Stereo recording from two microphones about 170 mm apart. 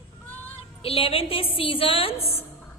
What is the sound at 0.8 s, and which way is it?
A woman's voice, 35° left (ahead or behind).